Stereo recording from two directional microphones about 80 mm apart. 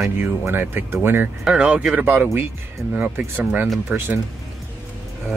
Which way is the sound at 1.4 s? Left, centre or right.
Centre.